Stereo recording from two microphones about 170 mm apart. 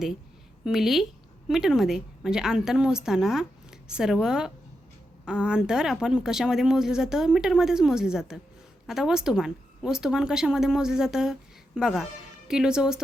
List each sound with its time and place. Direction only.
0.6 s speech: centre (ahead or behind)